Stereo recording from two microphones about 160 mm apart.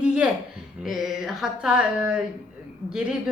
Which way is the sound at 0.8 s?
5° right (ahead or behind).